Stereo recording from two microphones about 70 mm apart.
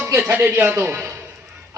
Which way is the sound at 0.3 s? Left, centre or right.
Right.